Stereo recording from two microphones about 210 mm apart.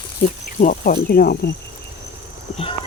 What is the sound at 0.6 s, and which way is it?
Speech, 40° left (ahead or behind).